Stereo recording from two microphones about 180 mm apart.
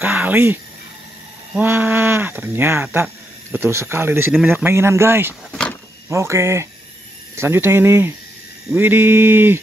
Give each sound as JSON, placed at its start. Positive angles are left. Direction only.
{"t": 0.0, "sound": "speech", "side_deg": -10}
{"t": 5.5, "sound": "power windows", "side_deg": 5}
{"t": 6.0, "sound": "speech", "side_deg": -15}